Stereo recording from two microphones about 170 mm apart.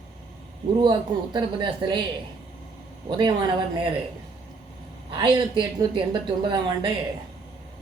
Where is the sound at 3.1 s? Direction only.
25° right (ahead or behind).